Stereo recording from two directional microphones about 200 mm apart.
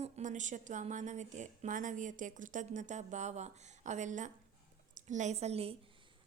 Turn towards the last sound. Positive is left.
turn(degrees=-30)  # may be behind; listen again after turning